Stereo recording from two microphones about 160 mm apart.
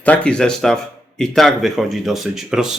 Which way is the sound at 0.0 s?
5° left (ahead or behind).